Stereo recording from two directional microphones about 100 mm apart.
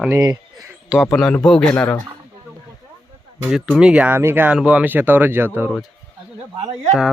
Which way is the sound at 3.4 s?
5° right (ahead or behind).